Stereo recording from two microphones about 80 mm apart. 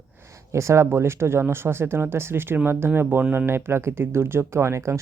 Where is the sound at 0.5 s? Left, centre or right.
Right.